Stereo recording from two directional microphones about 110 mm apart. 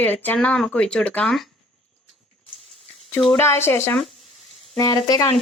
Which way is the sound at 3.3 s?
20° left (ahead or behind).